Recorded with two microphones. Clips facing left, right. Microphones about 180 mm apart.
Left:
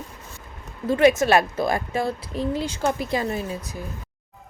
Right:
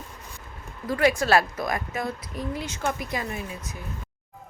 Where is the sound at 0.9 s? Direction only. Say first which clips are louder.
Left 5 dB; 25° left (ahead or behind).